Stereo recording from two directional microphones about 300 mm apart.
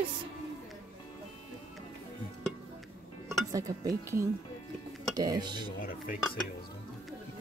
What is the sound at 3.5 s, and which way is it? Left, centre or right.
Speech, centre.